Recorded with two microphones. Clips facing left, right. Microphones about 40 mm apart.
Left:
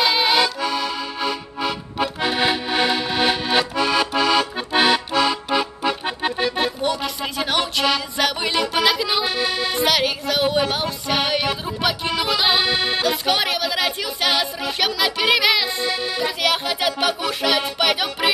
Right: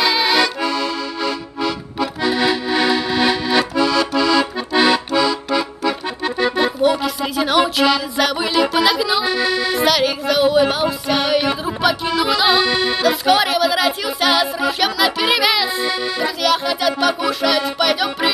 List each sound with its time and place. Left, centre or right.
0.0 s accordion: centre
6.5 s music: centre
7.0 s a sound: centre
7.7 s music: centre
12.1 s accordion: centre
16.4 s music: centre